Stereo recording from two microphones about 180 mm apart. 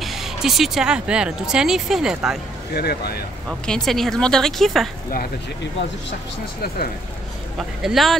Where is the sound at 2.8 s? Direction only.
60° left (ahead or behind).